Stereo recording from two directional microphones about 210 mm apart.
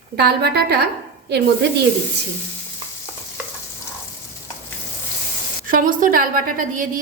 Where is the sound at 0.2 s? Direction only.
50° right (ahead or behind).